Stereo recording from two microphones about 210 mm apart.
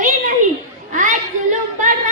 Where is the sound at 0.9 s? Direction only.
35° right (ahead or behind).